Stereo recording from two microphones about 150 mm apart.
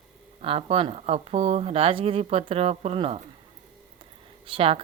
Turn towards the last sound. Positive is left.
turn(degrees=-40)  # may be behind; listen again after turning